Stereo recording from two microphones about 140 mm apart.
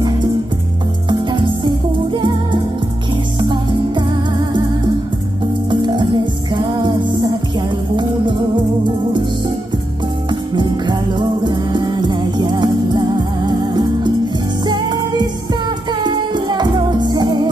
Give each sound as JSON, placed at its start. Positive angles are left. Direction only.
{"t": 1.0, "sound": "music", "side_deg": -35}
{"t": 10.5, "sound": "music", "side_deg": -35}